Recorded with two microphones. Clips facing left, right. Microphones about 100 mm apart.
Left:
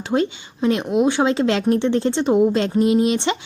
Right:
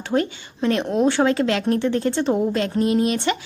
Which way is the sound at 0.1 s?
20° left (ahead or behind).